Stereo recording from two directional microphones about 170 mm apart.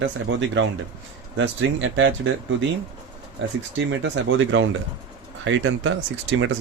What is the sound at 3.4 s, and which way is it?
Speech, 90° right.